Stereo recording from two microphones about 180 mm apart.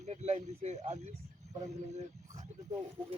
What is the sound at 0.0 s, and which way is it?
Speech, 40° right (ahead or behind).